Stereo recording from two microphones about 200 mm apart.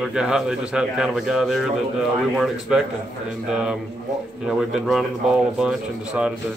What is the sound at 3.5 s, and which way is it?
A man's voice, 5° right (ahead or behind).